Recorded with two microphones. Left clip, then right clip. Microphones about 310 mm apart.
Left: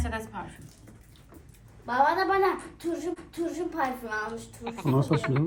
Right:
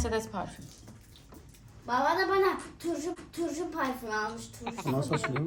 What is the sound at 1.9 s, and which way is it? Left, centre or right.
A woman's voice, centre.